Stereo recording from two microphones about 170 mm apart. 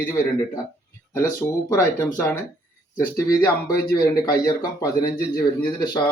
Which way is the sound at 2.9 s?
55° left (ahead or behind).